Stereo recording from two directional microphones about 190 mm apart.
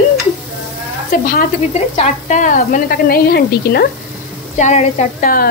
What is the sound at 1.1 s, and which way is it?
Speech, 50° left (ahead or behind).